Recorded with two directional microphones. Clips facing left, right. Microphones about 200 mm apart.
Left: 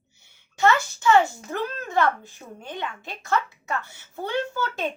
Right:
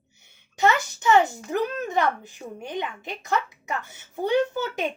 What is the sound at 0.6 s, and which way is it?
A child's voice, 20° right (ahead or behind).